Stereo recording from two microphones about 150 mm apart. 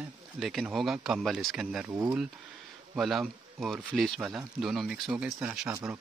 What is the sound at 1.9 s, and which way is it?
Speech, 15° right (ahead or behind).